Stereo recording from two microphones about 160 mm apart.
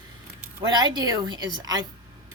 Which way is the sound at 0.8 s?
25° right (ahead or behind).